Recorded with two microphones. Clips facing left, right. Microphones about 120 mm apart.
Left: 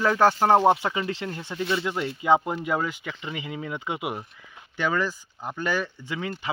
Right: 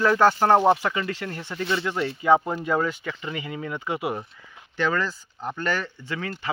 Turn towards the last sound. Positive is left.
turn(degrees=15)  # may be behind; listen again after turning